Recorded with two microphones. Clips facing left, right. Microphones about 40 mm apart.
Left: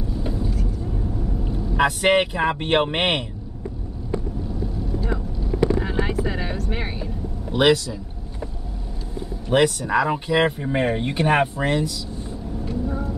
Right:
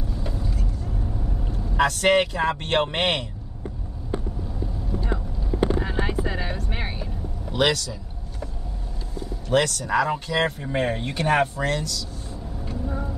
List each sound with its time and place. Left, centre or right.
0.2 s vehicle: centre
1.5 s speech: centre
5.8 s vehicle: centre
7.5 s vehicle: centre
9.5 s speech: centre
12.6 s vehicle: centre